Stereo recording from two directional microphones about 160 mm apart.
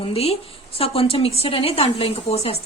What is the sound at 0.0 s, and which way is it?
Speech, 40° left (ahead or behind).